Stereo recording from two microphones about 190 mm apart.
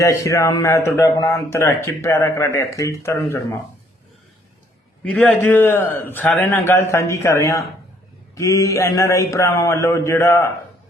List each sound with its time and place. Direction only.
0.0 s speech: 15° left (ahead or behind)
5.0 s speech: 5° left (ahead or behind)